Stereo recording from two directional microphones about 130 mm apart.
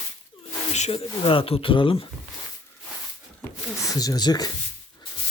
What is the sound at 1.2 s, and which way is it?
Speech, 45° left (ahead or behind).